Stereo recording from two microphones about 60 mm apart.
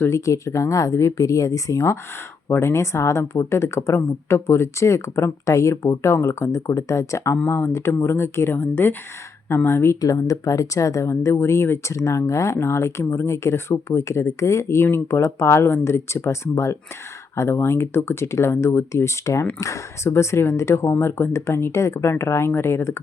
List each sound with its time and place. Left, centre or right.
0.0 s speech: left
2.5 s speech: left
7.4 s speech: left
10.0 s speech: left
11.9 s speech: left
20.8 s speech: left